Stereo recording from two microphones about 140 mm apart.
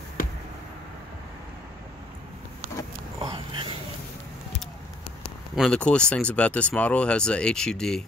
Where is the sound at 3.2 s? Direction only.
35° right (ahead or behind).